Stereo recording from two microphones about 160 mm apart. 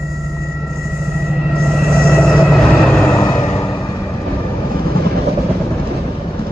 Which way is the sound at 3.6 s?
25° left (ahead or behind).